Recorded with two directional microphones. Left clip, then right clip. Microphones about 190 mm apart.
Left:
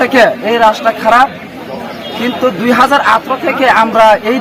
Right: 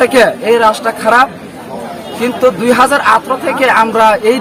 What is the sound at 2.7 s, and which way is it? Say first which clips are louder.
A man's voice: left 2 dB; 30° right (ahead or behind).